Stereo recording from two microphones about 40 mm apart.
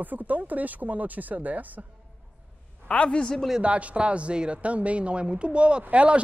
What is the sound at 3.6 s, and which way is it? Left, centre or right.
Speech, right.